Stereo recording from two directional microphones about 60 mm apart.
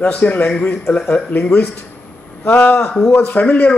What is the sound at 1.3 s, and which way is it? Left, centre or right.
A man's voice, left.